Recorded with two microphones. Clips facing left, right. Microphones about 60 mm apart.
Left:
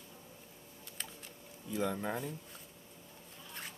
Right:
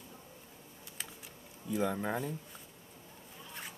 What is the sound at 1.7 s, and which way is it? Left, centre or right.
Speech, centre.